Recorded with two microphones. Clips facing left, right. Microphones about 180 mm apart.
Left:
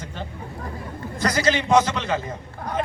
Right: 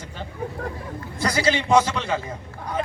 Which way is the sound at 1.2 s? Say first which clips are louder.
Left 1 dB; 10° right (ahead or behind).